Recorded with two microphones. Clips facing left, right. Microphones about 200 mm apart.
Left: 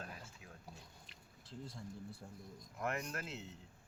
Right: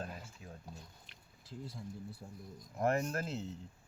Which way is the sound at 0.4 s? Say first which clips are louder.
Right 6 dB; 35° right (ahead or behind).